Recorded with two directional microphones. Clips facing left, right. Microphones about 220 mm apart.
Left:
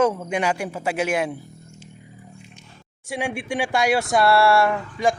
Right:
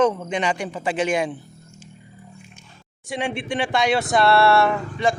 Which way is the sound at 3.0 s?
10° left (ahead or behind).